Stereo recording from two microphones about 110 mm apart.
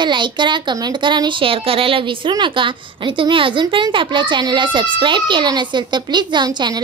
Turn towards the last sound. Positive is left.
turn(degrees=-40)  # may be behind; listen again after turning